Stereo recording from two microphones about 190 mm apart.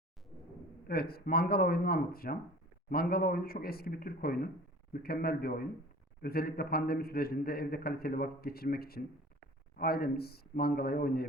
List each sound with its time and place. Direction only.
0.9 s a man's voice: 55° left (ahead or behind)